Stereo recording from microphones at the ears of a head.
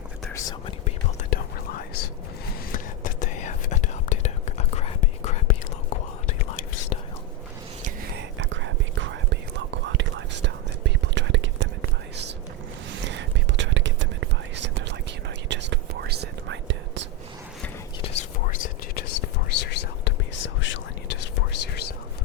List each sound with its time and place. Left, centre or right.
0.3 s whispering: left
7.8 s whispering: right
17.6 s whispering: left